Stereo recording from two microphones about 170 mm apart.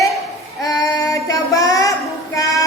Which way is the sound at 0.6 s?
20° left (ahead or behind).